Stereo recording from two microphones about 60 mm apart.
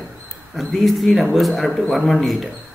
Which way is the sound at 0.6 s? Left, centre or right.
Centre.